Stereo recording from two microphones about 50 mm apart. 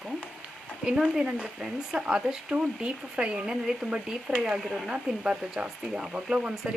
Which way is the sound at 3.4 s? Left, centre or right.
Centre.